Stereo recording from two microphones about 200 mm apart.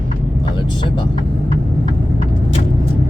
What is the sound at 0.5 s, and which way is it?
Vehicle, 25° left (ahead or behind).